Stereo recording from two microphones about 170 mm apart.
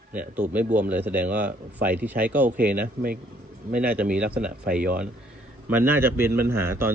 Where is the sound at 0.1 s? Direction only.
10° right (ahead or behind).